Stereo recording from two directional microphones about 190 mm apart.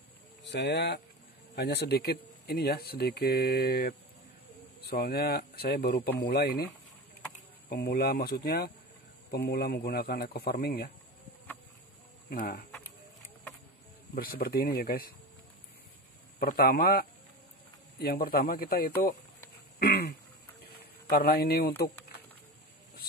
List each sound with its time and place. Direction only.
0.4 s speech: 65° left (ahead or behind)
7.7 s speech: 55° left (ahead or behind)
12.3 s speech: 50° left (ahead or behind)
14.1 s speech: 55° left (ahead or behind)
16.3 s speech: 50° left (ahead or behind)